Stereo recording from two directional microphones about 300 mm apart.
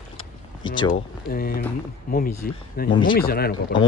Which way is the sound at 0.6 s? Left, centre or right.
Centre.